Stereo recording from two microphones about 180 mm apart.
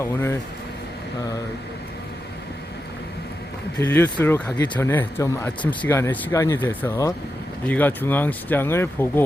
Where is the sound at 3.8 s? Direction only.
10° left (ahead or behind).